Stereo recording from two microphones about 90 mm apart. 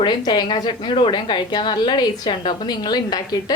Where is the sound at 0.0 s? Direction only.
55° left (ahead or behind).